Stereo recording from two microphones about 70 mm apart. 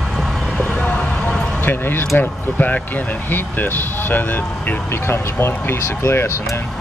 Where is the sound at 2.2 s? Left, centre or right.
Left.